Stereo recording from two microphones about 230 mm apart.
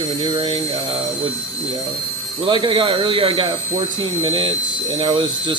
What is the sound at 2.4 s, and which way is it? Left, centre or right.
Speech, right.